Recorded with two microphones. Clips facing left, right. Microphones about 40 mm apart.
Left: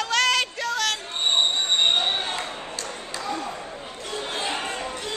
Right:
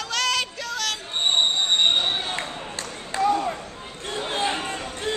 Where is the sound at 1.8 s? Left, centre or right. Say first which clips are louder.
Even; centre.